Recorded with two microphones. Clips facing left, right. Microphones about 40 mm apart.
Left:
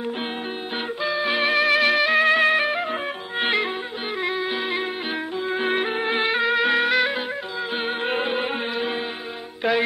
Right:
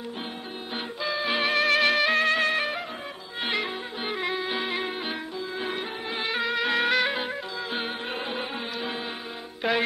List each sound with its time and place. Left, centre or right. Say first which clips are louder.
1.0 s music: left 4 dB; centre
2.2 s music: left 6 dB; centre
4.2 s music: left 4 dB; centre
5.5 s music: left 10 dB; left
6.3 s music: left 3 dB; centre
6.8 s music: left 3 dB; centre
8.1 s music: left 8 dB; left
9.6 s music: left 4 dB; centre